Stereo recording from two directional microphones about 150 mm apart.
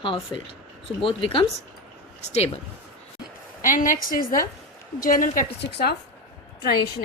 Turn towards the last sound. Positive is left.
turn(degrees=90)